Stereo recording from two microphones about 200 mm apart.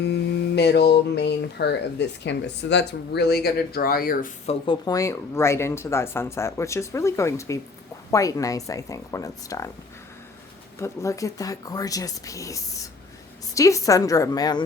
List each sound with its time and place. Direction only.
0.0 s speech: 55° left (ahead or behind)
4.4 s speech: 25° left (ahead or behind)
10.8 s speech: 15° left (ahead or behind)